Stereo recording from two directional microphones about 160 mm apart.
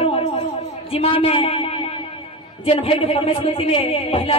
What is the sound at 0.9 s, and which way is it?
A man's voice, 35° left (ahead or behind).